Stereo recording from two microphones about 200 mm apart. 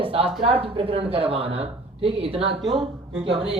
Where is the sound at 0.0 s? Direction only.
25° right (ahead or behind).